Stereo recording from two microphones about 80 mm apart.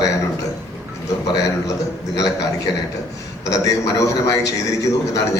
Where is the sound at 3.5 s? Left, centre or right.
Left.